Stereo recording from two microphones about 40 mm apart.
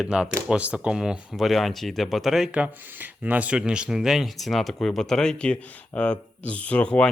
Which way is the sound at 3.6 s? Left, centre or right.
Right.